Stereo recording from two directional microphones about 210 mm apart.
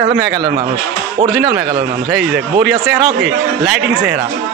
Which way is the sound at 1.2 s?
35° right (ahead or behind).